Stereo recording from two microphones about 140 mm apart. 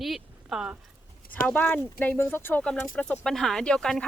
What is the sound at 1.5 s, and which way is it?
Speech, 10° left (ahead or behind).